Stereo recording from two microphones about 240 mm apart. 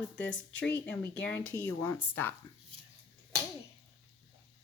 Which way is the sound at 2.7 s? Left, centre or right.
Right.